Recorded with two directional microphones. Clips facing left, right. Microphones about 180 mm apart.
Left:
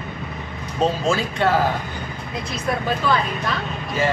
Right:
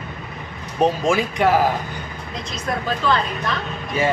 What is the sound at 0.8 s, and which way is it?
Speech, 15° right (ahead or behind).